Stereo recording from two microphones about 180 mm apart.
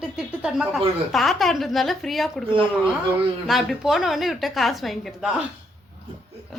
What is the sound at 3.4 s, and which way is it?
A woman's voice, centre (ahead or behind).